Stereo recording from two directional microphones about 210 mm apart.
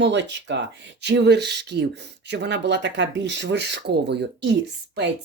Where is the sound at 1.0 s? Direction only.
55° right (ahead or behind).